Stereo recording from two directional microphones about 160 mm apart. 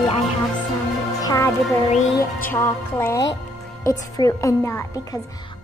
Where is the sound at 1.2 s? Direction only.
20° left (ahead or behind).